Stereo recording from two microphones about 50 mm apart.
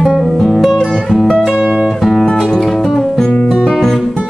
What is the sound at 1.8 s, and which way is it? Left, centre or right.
Music, centre.